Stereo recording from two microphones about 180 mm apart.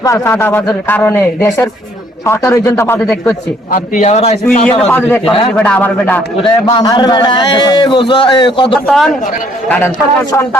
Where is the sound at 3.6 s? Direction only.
45° left (ahead or behind).